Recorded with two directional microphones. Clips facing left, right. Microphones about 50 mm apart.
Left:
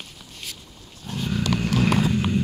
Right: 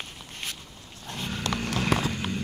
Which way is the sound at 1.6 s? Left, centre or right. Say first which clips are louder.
Left 6 dB; centre.